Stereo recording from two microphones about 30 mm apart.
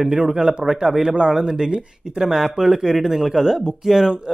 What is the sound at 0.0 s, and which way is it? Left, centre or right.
Speech, right.